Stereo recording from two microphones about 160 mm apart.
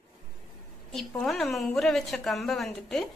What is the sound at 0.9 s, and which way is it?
A woman's voice, centre (ahead or behind).